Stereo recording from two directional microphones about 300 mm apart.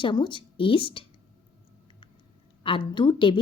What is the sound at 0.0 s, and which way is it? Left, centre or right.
A woman's voice, centre.